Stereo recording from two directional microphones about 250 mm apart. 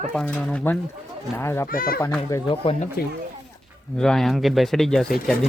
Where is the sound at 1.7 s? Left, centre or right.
Left.